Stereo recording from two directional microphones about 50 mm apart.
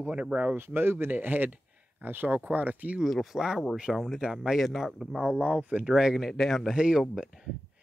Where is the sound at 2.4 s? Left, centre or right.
Right.